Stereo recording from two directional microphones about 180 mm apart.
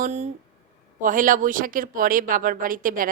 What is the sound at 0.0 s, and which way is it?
Speech, 40° right (ahead or behind).